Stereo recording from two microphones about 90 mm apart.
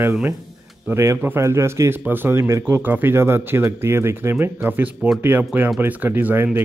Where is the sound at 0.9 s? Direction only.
30° right (ahead or behind).